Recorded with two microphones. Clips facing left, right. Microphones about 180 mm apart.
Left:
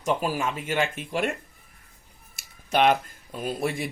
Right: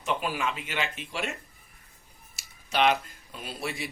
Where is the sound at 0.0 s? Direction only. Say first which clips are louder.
Left 4 dB; 40° left (ahead or behind).